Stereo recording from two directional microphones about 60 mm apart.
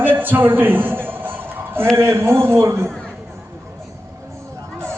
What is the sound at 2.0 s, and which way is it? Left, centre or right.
Speech, right.